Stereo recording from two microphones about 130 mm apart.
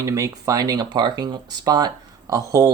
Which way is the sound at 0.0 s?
25° right (ahead or behind).